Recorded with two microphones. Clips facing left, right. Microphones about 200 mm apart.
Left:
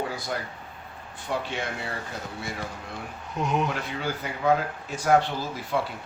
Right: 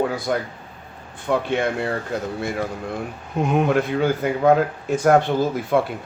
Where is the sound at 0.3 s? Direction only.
55° right (ahead or behind).